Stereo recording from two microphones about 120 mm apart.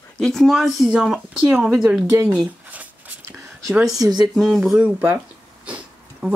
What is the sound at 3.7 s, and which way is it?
Speech, centre (ahead or behind).